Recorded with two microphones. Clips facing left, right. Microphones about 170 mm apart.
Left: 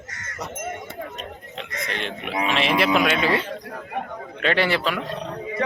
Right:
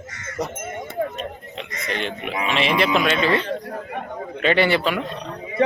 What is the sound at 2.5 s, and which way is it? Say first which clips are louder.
Speech: right 1 dB; centre (ahead or behind).